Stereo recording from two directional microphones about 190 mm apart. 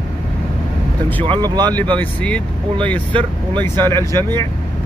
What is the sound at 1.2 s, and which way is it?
Speech, 25° right (ahead or behind).